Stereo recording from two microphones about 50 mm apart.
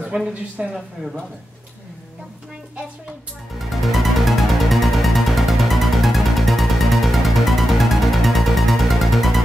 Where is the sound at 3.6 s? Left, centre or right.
Centre.